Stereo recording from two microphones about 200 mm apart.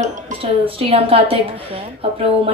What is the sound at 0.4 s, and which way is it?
Speech, 30° right (ahead or behind).